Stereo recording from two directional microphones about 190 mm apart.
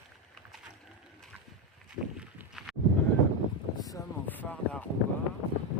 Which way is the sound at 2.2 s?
5° right (ahead or behind).